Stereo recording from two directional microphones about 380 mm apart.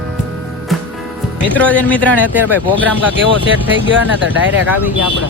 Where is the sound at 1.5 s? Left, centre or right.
Centre.